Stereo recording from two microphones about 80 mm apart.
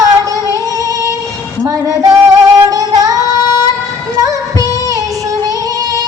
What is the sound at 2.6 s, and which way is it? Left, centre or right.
Female singing, right.